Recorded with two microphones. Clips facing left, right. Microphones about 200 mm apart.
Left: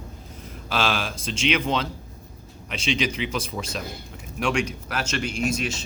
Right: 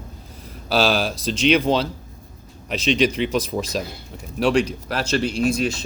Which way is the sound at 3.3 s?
40° right (ahead or behind).